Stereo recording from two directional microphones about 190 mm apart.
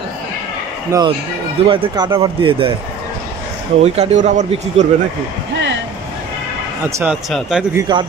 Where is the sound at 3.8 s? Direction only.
35° right (ahead or behind).